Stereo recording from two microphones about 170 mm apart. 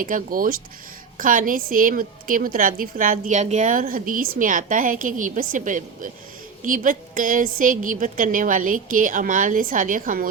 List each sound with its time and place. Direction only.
0.0 s a woman's voice: 50° right (ahead or behind)